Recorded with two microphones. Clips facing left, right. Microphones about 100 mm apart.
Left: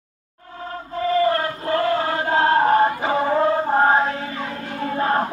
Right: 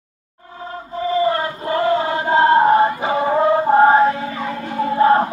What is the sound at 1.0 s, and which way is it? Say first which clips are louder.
Chant: right 1 dB; 20° right (ahead or behind).